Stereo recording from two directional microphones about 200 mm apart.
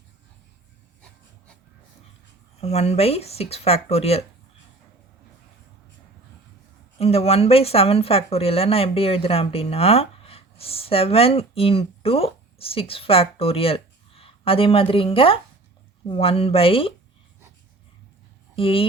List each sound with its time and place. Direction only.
2.6 s speech: 30° left (ahead or behind)
7.0 s speech: 30° left (ahead or behind)
18.5 s speech: 25° left (ahead or behind)